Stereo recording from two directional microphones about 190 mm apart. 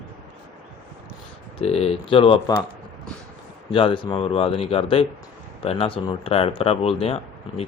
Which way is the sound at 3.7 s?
25° left (ahead or behind).